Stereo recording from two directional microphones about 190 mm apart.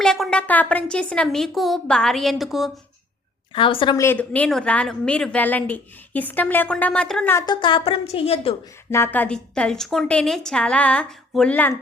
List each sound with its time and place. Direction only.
0.0 s a woman's voice: centre (ahead or behind)
3.5 s a woman's voice: 25° left (ahead or behind)
3.9 s a woman's voice: 10° left (ahead or behind)
7.3 s a woman's voice: 25° left (ahead or behind)
8.9 s a woman's voice: 10° left (ahead or behind)